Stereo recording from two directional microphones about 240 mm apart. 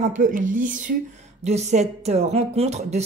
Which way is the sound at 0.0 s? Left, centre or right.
Right.